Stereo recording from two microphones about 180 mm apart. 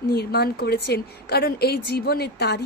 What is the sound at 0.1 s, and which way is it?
A woman's voice, 60° left (ahead or behind).